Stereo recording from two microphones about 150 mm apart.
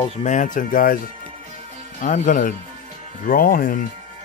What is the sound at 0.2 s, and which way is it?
Speech, 55° left (ahead or behind).